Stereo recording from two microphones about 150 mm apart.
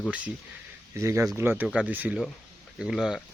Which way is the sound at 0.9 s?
20° right (ahead or behind).